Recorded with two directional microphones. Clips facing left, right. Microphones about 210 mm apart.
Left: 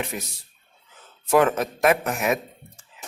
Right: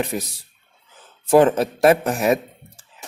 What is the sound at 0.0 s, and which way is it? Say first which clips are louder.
Speech: right 6 dB; 35° right (ahead or behind).